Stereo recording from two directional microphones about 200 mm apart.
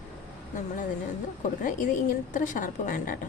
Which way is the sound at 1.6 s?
40° left (ahead or behind).